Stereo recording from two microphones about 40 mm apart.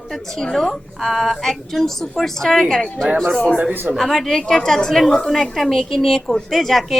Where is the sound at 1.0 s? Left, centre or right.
Centre.